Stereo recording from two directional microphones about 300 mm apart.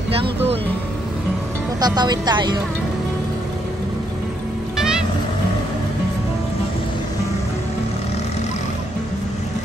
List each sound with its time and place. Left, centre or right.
0.1 s music: centre
1.8 s a woman's voice: centre
4.7 s music: centre